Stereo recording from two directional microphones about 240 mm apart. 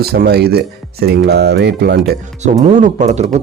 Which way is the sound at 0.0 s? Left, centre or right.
Right.